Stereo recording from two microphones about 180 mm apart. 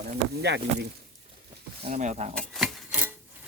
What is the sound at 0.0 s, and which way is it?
Speech, 70° right (ahead or behind).